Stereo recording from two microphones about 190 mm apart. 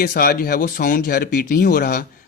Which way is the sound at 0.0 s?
50° left (ahead or behind).